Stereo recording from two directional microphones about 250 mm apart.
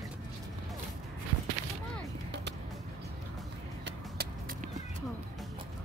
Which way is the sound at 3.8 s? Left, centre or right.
Right.